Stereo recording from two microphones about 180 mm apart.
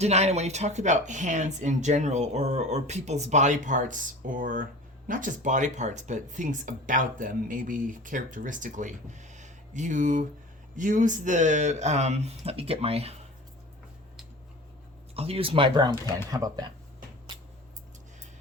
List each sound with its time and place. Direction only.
0.0 s speech: 35° right (ahead or behind)
15.1 s speech: 35° right (ahead or behind)